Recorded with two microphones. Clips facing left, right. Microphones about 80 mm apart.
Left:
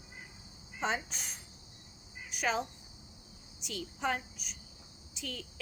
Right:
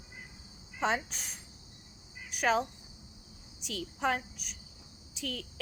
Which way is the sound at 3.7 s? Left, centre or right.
Right.